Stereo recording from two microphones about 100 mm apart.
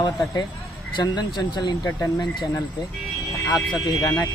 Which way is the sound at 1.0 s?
45° left (ahead or behind).